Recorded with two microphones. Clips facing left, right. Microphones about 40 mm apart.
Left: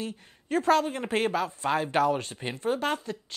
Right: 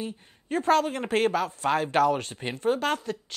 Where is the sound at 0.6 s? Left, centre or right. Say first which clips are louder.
Right 1 dB; right.